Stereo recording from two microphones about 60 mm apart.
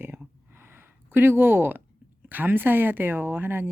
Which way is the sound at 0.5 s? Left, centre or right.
Right.